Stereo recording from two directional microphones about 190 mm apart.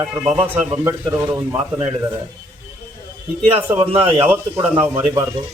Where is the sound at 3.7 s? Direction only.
30° right (ahead or behind).